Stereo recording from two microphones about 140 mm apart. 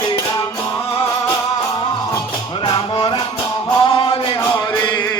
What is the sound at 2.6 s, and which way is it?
Music, 35° left (ahead or behind).